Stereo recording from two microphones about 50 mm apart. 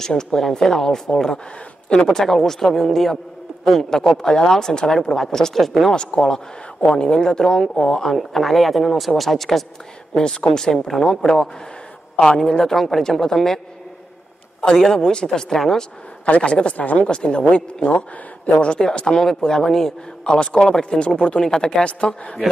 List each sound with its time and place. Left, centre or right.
0.0 s speech: centre
5.9 s speech: centre
10.1 s speech: centre
14.6 s speech: centre
16.3 s speech: left
17.0 s speech: centre
20.2 s speech: centre
20.6 s speech: centre
21.0 s speech: left
21.8 s speech: left